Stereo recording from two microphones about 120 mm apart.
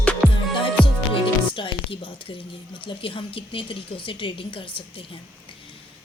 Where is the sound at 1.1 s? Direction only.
45° left (ahead or behind).